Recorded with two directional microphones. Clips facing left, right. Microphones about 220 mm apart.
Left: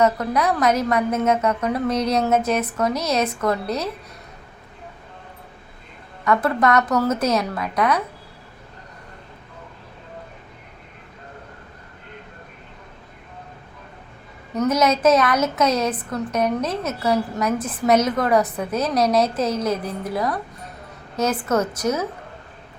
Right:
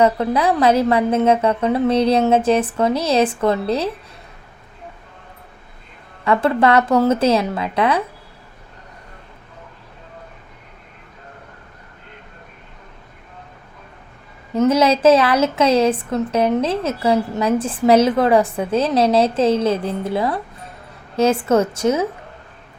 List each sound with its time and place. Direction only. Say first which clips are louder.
0.0 s a woman's voice: right 3 dB; 30° right (ahead or behind)
6.2 s a woman's voice: right 3 dB; 30° right (ahead or behind)
14.5 s a woman's voice: right 4 dB; 30° right (ahead or behind)